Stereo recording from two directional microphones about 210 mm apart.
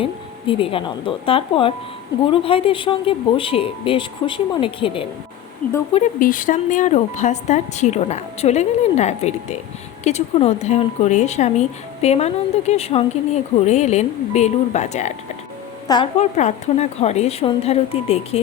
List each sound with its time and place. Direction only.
0.0 s speech: 25° left (ahead or behind)
5.9 s a woman's voice: 40° left (ahead or behind)
16.1 s speech: 35° left (ahead or behind)